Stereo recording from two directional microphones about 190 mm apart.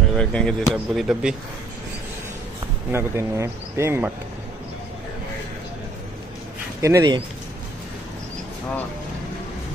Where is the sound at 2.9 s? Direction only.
15° right (ahead or behind).